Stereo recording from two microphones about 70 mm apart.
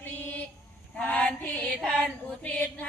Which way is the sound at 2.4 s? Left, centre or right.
Left.